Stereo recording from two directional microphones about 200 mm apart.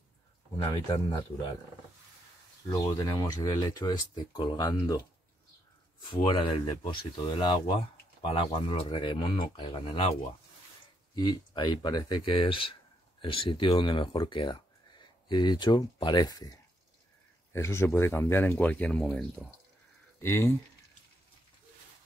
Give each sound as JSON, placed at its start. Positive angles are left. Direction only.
{"t": 0.7, "sound": "speech", "side_deg": 20}
{"t": 2.7, "sound": "speech", "side_deg": 20}
{"t": 6.0, "sound": "speech", "side_deg": 25}
{"t": 11.1, "sound": "speech", "side_deg": 20}